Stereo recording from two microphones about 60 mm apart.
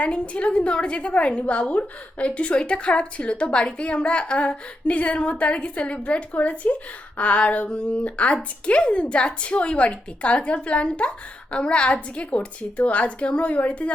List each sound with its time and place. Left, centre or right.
0.0 s a woman's voice: left